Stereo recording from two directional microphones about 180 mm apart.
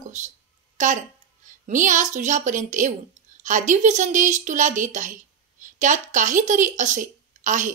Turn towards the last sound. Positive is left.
turn(degrees=-45)  # may be behind; listen again after turning